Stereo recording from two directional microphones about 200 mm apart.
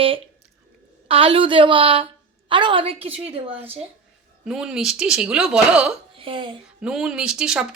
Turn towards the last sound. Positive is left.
turn(degrees=-5)  # may be behind; listen again after turning